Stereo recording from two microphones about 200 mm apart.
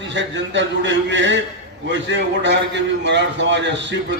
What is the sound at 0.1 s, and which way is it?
A man's voice, 65° right (ahead or behind).